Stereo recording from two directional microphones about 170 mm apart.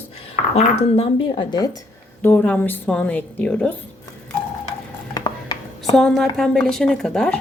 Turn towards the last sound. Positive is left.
turn(degrees=5)  # may be behind; listen again after turning